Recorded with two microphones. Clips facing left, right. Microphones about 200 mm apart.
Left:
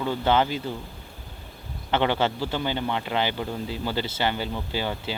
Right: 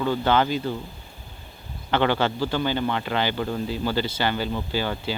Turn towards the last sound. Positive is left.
turn(degrees=20)  # may be behind; listen again after turning